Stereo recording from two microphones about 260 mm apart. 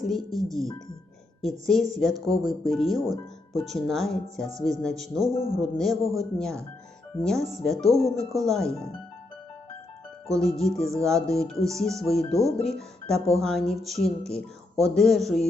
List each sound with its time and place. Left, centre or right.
0.0 s speech: centre
5.4 s speech: left
5.7 s speech: centre
10.6 s speech: centre